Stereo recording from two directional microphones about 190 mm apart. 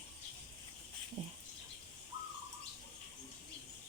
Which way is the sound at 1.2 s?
35° right (ahead or behind).